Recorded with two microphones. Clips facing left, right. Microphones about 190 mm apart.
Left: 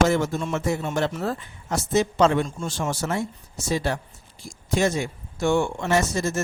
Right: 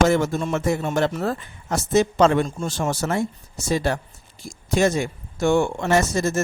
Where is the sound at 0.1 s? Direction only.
50° right (ahead or behind).